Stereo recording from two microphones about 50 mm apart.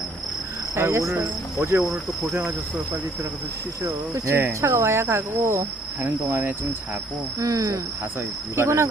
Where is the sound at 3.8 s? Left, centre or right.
Right.